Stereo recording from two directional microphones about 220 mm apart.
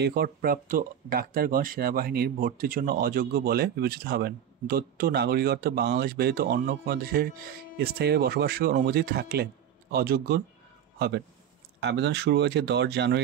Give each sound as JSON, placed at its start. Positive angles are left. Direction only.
{"t": 0.0, "sound": "speech", "side_deg": -45}